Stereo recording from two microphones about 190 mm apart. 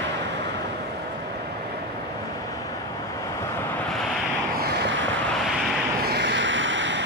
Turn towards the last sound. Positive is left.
turn(degrees=-75)  # may be behind; listen again after turning